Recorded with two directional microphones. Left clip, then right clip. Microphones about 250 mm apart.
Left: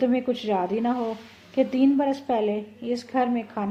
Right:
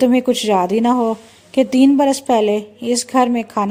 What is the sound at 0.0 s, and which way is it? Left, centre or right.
Speech, right.